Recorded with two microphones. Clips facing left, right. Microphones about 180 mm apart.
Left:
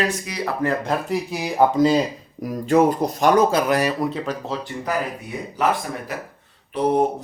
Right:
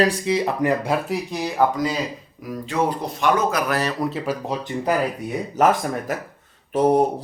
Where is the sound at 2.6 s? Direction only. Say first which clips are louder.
Left 7 dB; 45° left (ahead or behind).